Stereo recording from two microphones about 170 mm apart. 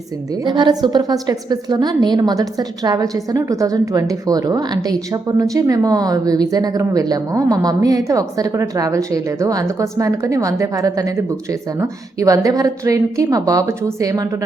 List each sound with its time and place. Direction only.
0.4 s a woman's voice: 25° right (ahead or behind)